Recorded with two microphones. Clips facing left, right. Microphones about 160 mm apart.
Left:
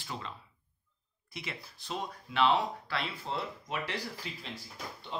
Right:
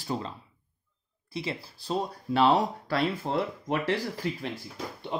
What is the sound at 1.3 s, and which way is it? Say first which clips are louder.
Speech: right 9 dB; 30° right (ahead or behind).